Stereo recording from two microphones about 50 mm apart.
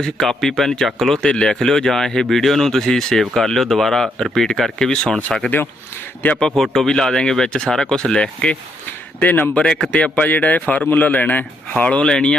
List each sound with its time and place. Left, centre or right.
0.0 s speech: centre
6.6 s speech: centre
8.9 s speech: left
9.6 s speech: centre
10.2 s a man's voice: left
12.0 s speech: centre